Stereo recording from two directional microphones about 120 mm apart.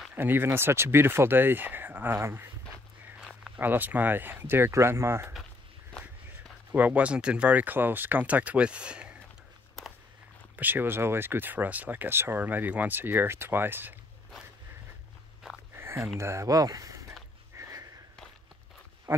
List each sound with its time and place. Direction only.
0.1 s speech: 15° right (ahead or behind)
3.2 s a sound: centre (ahead or behind)
3.5 s speech: 15° right (ahead or behind)
6.7 s speech: 10° right (ahead or behind)
10.5 s speech: 15° right (ahead or behind)
15.7 s a sound: 20° right (ahead or behind)
16.2 s speech: 25° right (ahead or behind)
17.6 s sniff: 25° right (ahead or behind)
19.1 s speech: 20° right (ahead or behind)